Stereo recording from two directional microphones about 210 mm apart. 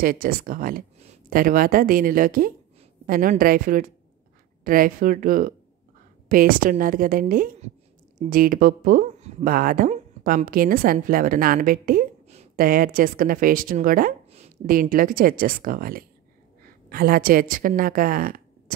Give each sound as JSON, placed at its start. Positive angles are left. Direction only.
{"t": 0.0, "sound": "a woman's voice", "side_deg": -45}